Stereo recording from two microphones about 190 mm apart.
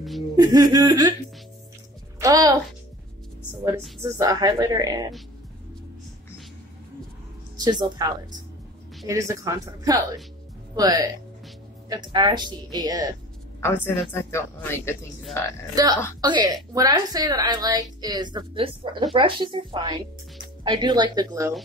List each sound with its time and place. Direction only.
0.4 s a woman's voice: 20° right (ahead or behind)
2.1 s a woman's voice: 20° right (ahead or behind)
4.0 s a woman's voice: 20° right (ahead or behind)
7.8 s a woman's voice: 20° right (ahead or behind)
13.6 s a woman's voice: 10° left (ahead or behind)
15.7 s a woman's voice: 20° right (ahead or behind)